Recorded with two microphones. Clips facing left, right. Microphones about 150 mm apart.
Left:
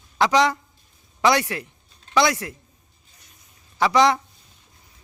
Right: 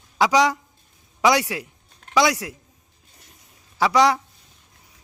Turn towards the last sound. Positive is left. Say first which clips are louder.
# even
turn(degrees=-5)  # may be behind; listen again after turning